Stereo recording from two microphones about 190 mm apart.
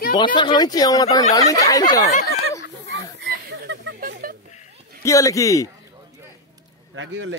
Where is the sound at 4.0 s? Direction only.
50° right (ahead or behind).